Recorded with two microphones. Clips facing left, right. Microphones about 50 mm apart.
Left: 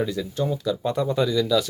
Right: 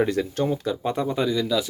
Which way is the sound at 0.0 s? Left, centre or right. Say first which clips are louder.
Right 3 dB; right.